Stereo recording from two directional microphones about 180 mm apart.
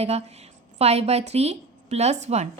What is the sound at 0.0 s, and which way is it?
A woman's voice, 35° right (ahead or behind).